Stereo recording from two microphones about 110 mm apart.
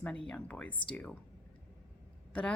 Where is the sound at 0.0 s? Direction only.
10° left (ahead or behind).